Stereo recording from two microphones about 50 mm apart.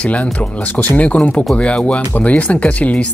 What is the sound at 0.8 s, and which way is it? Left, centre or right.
Speech, left.